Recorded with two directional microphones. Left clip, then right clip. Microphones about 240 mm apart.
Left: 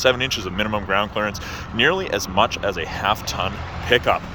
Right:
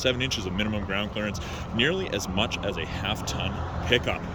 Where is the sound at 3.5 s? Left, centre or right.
Right.